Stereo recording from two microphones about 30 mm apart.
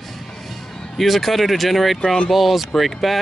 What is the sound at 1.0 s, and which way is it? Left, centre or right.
Speech, centre.